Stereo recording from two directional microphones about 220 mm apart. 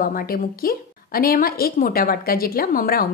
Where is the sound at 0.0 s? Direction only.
40° left (ahead or behind).